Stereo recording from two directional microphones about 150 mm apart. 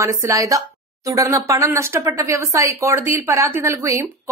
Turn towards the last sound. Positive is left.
turn(degrees=-20)  # may be behind; listen again after turning